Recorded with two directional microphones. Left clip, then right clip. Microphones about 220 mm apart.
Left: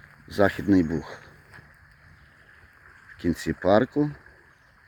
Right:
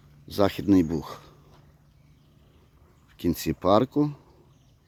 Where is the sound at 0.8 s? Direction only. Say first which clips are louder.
Even; 15° right (ahead or behind).